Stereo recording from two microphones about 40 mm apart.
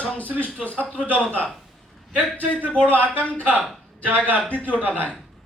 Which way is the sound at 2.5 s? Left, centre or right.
Left.